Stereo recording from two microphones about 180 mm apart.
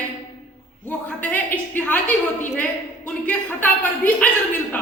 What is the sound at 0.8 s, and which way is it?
A woman's voice, 10° left (ahead or behind).